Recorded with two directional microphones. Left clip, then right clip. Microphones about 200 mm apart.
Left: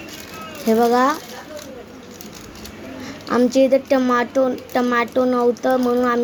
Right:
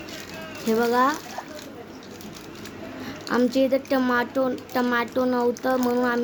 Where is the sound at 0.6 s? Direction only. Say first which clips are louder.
Left 5 dB; 20° left (ahead or behind).